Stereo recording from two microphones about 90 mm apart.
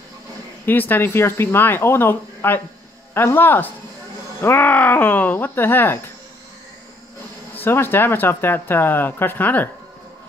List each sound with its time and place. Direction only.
0.7 s speech: 20° left (ahead or behind)
7.5 s speech: 25° left (ahead or behind)